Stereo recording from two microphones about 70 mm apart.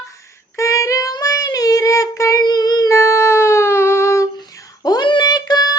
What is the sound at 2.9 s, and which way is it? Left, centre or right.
Cat, left.